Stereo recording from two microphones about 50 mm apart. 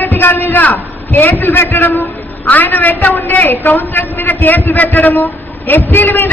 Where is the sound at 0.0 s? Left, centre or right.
Left.